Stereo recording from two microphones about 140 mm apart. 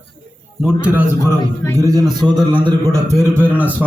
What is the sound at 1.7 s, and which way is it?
Speech, 25° right (ahead or behind).